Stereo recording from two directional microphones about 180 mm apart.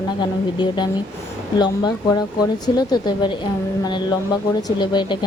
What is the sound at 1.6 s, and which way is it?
Speech, 25° left (ahead or behind).